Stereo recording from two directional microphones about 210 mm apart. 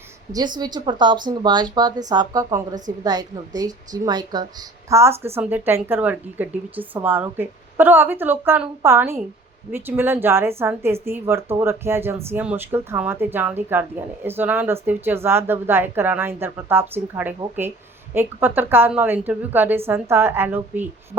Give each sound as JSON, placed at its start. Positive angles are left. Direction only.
{"t": 0.3, "sound": "a woman's voice", "side_deg": -20}